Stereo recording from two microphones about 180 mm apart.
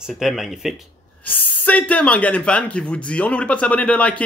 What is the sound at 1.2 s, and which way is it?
Speech, 10° left (ahead or behind).